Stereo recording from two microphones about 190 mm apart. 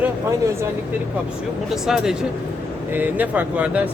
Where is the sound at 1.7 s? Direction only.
5° right (ahead or behind).